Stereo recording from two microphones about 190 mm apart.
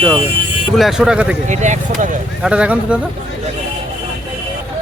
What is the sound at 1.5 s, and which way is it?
Speech, 40° right (ahead or behind).